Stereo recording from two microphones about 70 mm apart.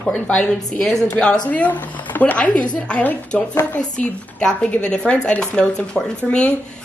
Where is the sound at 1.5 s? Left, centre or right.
Left.